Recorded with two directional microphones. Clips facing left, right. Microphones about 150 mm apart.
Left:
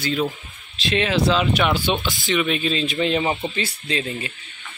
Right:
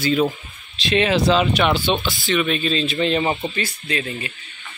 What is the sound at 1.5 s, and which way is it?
Speech, 10° left (ahead or behind).